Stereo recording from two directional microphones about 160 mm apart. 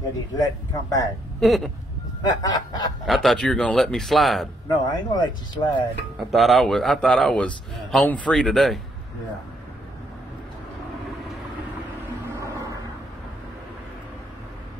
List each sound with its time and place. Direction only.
0.4 s speech: 20° left (ahead or behind)
1.4 s a man's voice: centre (ahead or behind)
2.4 s speech: 25° left (ahead or behind)
3.1 s a man's voice: centre (ahead or behind)
4.6 s speech: 25° left (ahead or behind)
6.1 s a man's voice: centre (ahead or behind)
12.4 s a sound: 20° right (ahead or behind)